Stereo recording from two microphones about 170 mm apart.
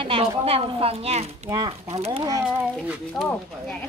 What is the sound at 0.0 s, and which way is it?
A woman's voice, 35° right (ahead or behind).